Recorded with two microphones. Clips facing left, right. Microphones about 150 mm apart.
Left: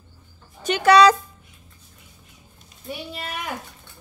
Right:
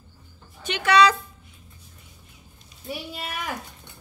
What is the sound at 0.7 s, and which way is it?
Speech, 40° left (ahead or behind).